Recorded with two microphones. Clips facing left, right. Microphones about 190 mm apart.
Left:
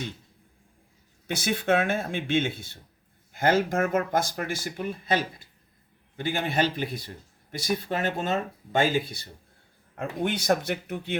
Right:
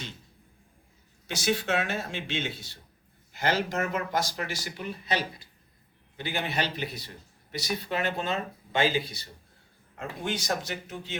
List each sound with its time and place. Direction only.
1.3 s speech: 55° left (ahead or behind)